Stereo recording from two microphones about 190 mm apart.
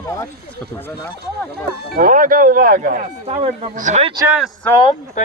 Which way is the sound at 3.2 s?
35° right (ahead or behind).